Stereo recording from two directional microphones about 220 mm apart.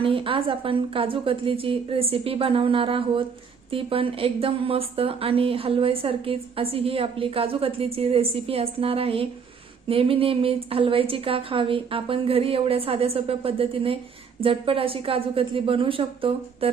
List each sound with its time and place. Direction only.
0.0 s a woman's voice: 25° right (ahead or behind)